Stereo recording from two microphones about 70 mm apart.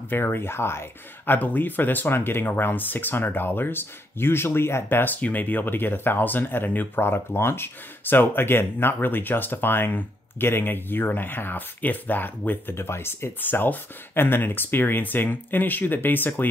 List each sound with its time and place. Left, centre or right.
0.1 s speech: left